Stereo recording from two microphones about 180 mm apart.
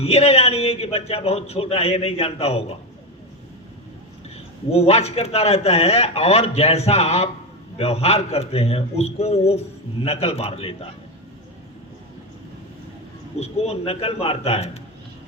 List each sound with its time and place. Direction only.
0.0 s a man's voice: 35° left (ahead or behind)
4.7 s a man's voice: 35° left (ahead or behind)
13.4 s a man's voice: 35° left (ahead or behind)